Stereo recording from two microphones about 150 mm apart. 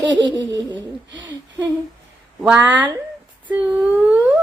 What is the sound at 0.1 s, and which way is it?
Laughter, 30° right (ahead or behind).